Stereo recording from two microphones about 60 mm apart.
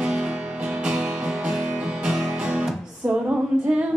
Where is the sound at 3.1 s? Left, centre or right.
Centre.